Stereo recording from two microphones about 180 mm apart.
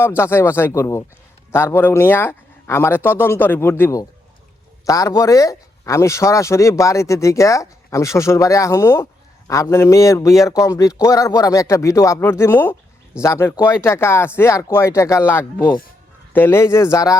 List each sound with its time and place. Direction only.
0.2 s speech: 15° left (ahead or behind)